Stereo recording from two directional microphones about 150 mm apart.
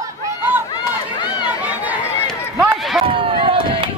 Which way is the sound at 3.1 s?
35° right (ahead or behind).